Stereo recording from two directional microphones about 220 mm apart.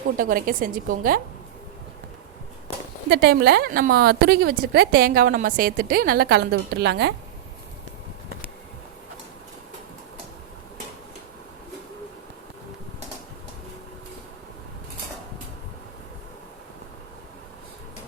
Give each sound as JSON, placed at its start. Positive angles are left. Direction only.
{"t": 0.2, "sound": "a woman's voice", "side_deg": -40}
{"t": 3.1, "sound": "a woman's voice", "side_deg": -45}